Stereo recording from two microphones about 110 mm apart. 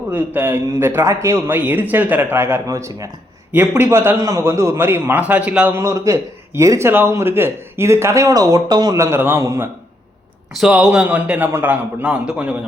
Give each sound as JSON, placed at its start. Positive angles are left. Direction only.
{"t": 0.1, "sound": "a man's voice", "side_deg": -20}
{"t": 5.8, "sound": "speech", "side_deg": -30}
{"t": 10.6, "sound": "a man's voice", "side_deg": -5}